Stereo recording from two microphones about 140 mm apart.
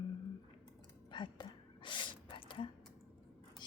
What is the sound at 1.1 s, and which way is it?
Gasp, 35° left (ahead or behind).